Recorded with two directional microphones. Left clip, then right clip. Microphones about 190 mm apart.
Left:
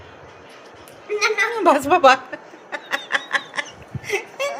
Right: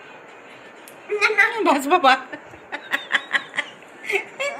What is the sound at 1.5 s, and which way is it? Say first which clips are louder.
Snicker: left 2 dB; 60° left (ahead or behind).